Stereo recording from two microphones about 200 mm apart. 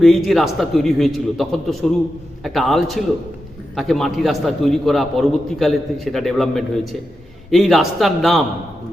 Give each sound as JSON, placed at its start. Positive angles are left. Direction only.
{"t": 0.0, "sound": "a man's voice", "side_deg": 0}